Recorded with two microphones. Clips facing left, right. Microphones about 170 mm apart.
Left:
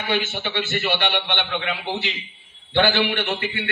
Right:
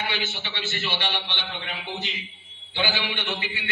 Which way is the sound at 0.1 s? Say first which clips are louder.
Left 8 dB; 55° left (ahead or behind).